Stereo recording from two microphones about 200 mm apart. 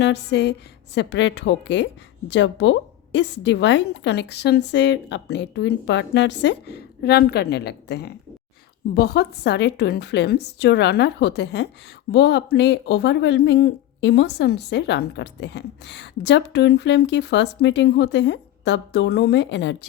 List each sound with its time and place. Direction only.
0.0 s speech: 55° left (ahead or behind)